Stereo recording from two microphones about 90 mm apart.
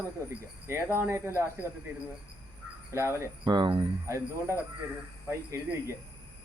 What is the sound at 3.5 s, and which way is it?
Speech, 55° right (ahead or behind).